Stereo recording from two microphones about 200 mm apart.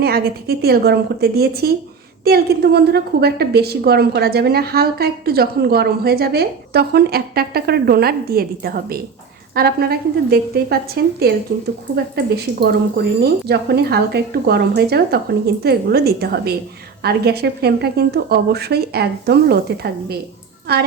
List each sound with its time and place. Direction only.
0.0 s a woman's voice: 50° right (ahead or behind)